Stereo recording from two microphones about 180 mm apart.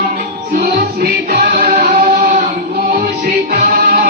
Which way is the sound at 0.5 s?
60° right (ahead or behind).